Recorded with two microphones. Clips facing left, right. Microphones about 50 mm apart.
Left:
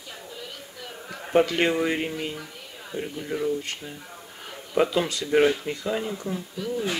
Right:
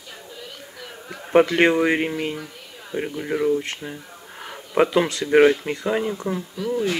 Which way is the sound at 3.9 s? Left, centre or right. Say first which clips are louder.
Right 3 dB; centre.